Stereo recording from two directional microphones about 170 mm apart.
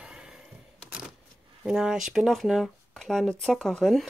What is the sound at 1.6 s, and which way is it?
Speech, 5° right (ahead or behind).